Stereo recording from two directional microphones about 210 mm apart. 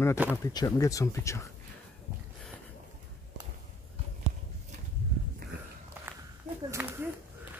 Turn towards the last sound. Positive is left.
turn(degrees=-10)  # may be behind; listen again after turning